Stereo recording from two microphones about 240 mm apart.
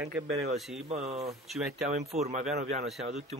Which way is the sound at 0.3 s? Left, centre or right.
Right.